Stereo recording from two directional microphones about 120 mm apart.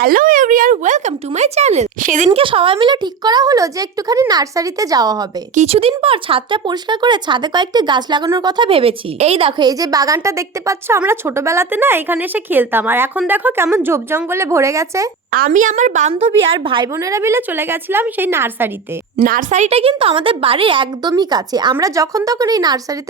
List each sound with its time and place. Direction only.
0.4 s speech: 90° right
2.3 s a woman's voice: 50° right (ahead or behind); by 5.2 s 30° right (ahead or behind)
5.5 s a woman's voice: 55° right (ahead or behind)
9.6 s a woman's voice: 30° right (ahead or behind)
15.4 s a woman's voice: 90° right
16.1 s a woman's voice: 45° right (ahead or behind)
16.9 s a woman's voice: 25° right (ahead or behind)
19.1 s a woman's voice: 85° right; by 23.0 s 35° right (ahead or behind)